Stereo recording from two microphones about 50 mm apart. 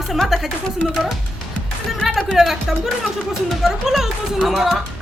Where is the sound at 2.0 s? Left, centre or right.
Centre.